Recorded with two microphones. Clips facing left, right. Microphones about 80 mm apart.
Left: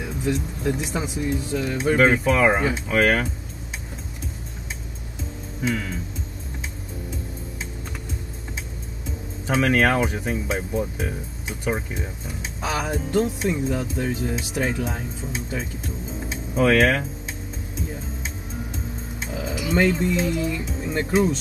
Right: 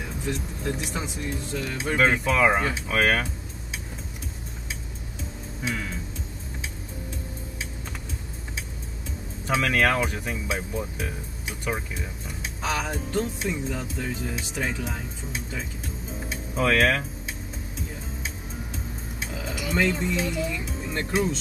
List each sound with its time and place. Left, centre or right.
0.0 s speech: centre
5.6 s speech: centre
9.7 s speech: centre
11.7 s speech: left
12.3 s speech: centre
16.1 s music: centre
16.6 s speech: centre
19.1 s music: centre
21.1 s speech: centre